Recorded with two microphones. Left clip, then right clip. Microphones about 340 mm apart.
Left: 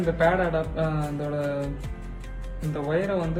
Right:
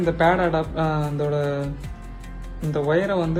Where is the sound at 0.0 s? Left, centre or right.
Centre.